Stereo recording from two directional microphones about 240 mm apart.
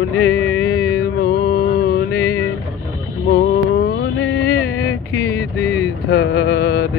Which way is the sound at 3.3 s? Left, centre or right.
Left.